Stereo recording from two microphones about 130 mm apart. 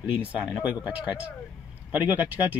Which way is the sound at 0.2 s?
10° right (ahead or behind).